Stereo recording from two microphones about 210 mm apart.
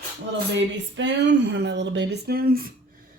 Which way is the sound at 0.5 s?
60° right (ahead or behind).